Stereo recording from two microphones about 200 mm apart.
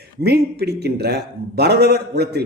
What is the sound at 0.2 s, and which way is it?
A man's voice, 55° right (ahead or behind).